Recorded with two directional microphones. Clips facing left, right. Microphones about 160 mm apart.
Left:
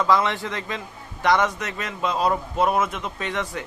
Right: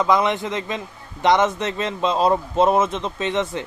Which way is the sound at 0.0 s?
20° right (ahead or behind).